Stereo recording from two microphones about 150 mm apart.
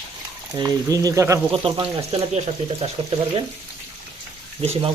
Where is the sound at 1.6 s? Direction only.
40° right (ahead or behind).